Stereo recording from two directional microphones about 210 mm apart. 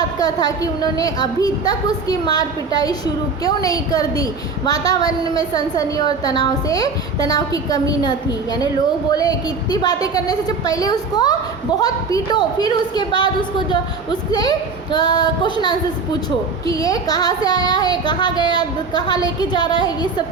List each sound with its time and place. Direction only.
0.0 s a woman's voice: 20° left (ahead or behind)